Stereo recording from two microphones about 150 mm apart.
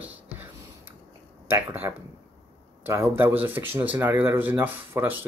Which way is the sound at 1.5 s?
15° right (ahead or behind).